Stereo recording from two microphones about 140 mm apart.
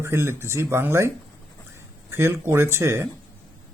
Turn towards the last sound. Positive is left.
turn(degrees=-20)  # may be behind; listen again after turning